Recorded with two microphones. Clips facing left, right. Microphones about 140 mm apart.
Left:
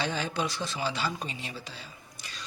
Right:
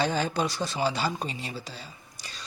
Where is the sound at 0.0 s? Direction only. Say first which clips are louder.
Right 4 dB; 40° right (ahead or behind).